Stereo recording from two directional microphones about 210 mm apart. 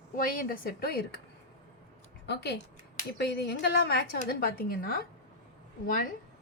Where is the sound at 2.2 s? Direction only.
50° left (ahead or behind).